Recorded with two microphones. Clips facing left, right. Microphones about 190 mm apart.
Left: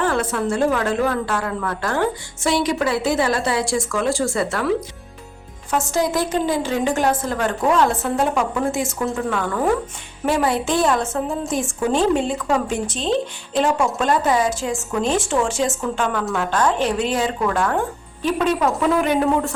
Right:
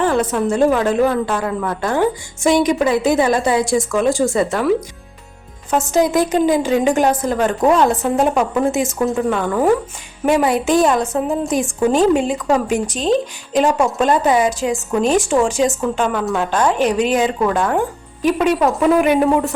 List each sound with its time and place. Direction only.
0.0 s a woman's voice: 20° right (ahead or behind)
5.7 s a woman's voice: 20° right (ahead or behind)